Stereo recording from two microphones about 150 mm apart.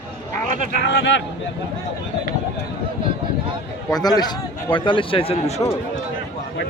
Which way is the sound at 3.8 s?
25° left (ahead or behind).